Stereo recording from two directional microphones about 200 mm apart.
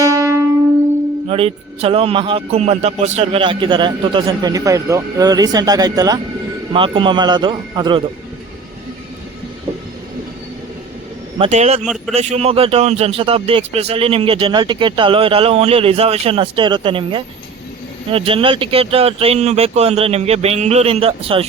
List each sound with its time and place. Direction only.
0.0 s music: 15° right (ahead or behind)
1.3 s a man's voice: 30° right (ahead or behind)
11.3 s a man's voice: 35° right (ahead or behind)